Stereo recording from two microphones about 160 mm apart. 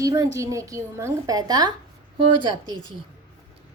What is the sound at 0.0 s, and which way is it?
A woman's voice, 25° right (ahead or behind).